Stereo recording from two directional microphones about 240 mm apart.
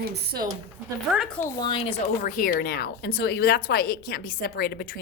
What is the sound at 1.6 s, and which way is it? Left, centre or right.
Speech, left.